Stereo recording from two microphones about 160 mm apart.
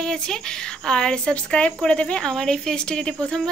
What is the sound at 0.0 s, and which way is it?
A woman's voice, 5° left (ahead or behind).